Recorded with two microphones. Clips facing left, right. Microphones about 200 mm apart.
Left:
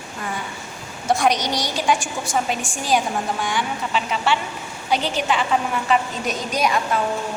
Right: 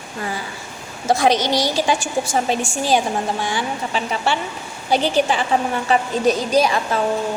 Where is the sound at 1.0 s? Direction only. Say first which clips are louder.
Right 3 dB; 30° right (ahead or behind).